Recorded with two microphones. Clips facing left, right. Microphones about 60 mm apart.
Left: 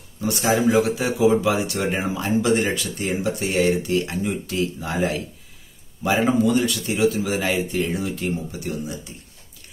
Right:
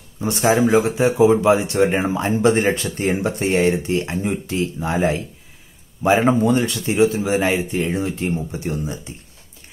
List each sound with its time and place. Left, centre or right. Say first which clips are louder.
0.2 s speech: right 3 dB; right